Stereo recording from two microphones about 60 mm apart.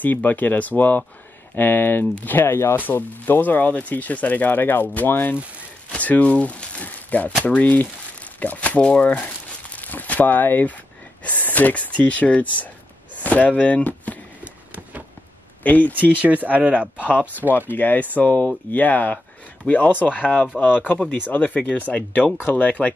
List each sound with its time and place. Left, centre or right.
0.0 s speech: left
2.8 s speech: left
15.6 s speech: left
16.4 s speech: right
17.1 s speech: left